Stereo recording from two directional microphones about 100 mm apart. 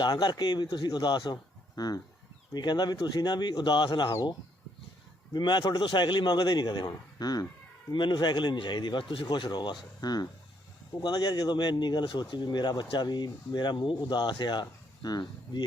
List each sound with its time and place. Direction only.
0.0 s speech: 45° left (ahead or behind)